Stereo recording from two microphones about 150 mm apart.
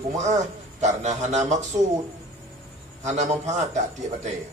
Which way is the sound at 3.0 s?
50° right (ahead or behind).